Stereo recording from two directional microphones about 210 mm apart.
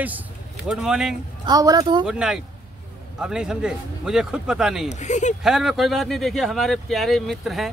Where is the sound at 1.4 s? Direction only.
20° right (ahead or behind).